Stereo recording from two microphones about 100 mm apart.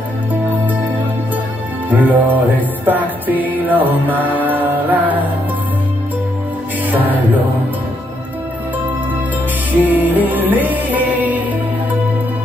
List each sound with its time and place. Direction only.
1.9 s music: 15° right (ahead or behind)
9.8 s music: 15° right (ahead or behind)